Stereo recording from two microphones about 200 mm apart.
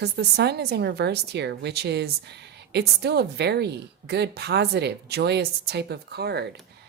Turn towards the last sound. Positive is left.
turn(degrees=-55)  # may be behind; listen again after turning